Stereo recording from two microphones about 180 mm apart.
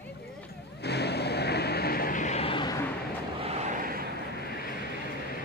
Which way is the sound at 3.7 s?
55° right (ahead or behind).